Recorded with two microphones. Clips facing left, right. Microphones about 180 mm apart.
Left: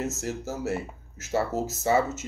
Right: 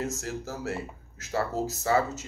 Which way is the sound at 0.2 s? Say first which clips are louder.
Left 3 dB; 20° left (ahead or behind).